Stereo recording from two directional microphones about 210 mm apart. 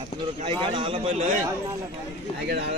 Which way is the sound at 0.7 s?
25° right (ahead or behind).